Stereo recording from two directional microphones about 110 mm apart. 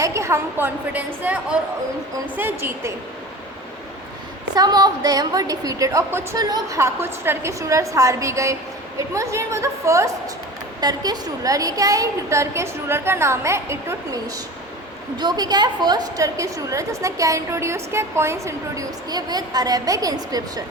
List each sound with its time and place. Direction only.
0.0 s a woman's voice: 25° right (ahead or behind)
4.5 s a woman's voice: 40° right (ahead or behind)
6.4 s a woman's voice: 35° right (ahead or behind)
6.7 s a woman's voice: 25° right (ahead or behind)
10.8 s a woman's voice: 40° right (ahead or behind)
15.2 s a woman's voice: 40° right (ahead or behind)